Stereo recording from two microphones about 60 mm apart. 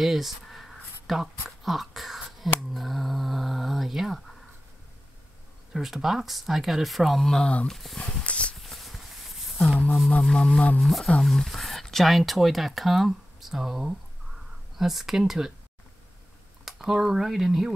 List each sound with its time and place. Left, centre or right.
0.0 s speech: centre
5.7 s speech: centre
8.2 s a sound: centre
8.5 s a sound: centre
10.2 s speech: centre
16.6 s speech: centre